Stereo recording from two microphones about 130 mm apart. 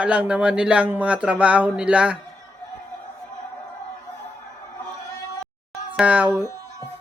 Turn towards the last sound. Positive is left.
turn(degrees=-10)  # may be behind; listen again after turning